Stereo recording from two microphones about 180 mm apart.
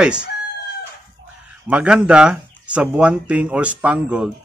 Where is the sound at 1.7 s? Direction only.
5° right (ahead or behind).